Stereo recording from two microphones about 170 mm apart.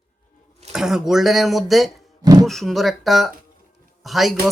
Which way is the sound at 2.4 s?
Centre (ahead or behind).